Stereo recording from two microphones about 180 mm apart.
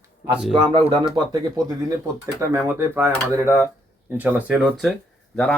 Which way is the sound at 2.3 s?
15° right (ahead or behind).